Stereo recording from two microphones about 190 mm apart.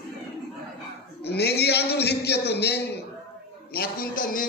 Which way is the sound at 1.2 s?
60° left (ahead or behind).